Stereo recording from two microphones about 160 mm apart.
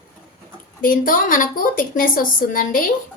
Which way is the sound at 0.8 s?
60° left (ahead or behind).